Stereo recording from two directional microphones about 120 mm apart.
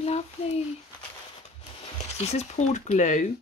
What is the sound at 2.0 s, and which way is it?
Speech, 65° left (ahead or behind).